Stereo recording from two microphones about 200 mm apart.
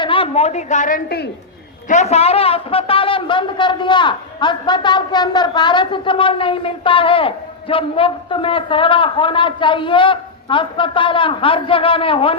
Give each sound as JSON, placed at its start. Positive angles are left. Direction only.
{"t": 0.0, "sound": "a woman's voice", "side_deg": 25}
{"t": 1.9, "sound": "a man's voice", "side_deg": 35}